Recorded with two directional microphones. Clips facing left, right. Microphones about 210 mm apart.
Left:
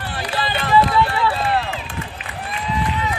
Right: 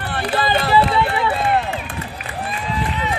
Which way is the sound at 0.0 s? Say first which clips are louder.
Right 4 dB; 60° right (ahead or behind).